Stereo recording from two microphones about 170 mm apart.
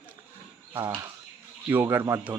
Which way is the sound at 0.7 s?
15° right (ahead or behind).